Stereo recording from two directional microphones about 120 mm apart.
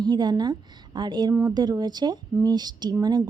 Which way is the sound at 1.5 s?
35° right (ahead or behind).